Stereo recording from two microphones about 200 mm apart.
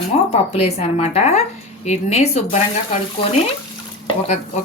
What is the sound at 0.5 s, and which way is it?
Speech, 30° left (ahead or behind).